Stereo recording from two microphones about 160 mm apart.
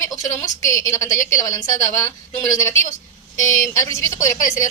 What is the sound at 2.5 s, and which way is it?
A woman's voice, 20° left (ahead or behind).